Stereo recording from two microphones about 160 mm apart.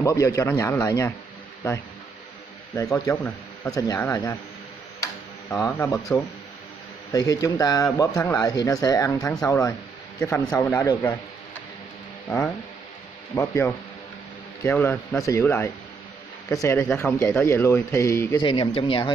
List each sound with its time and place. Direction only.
0.0 s speech: 20° left (ahead or behind)
2.8 s speech: 20° left (ahead or behind)
5.0 s tick-tock: 20° left (ahead or behind)
7.1 s speech: 20° left (ahead or behind)
10.4 s speech: 5° left (ahead or behind)
13.3 s speech: 15° left (ahead or behind)
18.4 s speech: 30° left (ahead or behind)